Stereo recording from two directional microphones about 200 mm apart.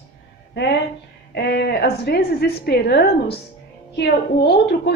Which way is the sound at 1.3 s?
55° left (ahead or behind).